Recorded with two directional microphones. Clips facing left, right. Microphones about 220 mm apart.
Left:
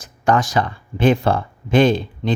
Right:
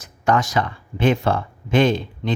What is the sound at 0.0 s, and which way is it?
Speech, 30° left (ahead or behind).